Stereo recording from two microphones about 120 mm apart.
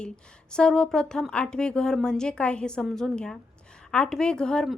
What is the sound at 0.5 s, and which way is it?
A woman's voice, 5° left (ahead or behind).